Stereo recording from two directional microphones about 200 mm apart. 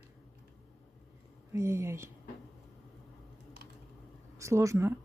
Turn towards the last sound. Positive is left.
turn(degrees=-15)  # may be behind; listen again after turning